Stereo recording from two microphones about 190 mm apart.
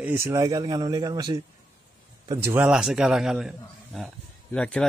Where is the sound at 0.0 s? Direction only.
15° right (ahead or behind).